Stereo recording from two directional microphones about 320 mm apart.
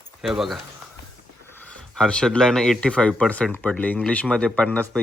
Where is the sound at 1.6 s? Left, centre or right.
Centre.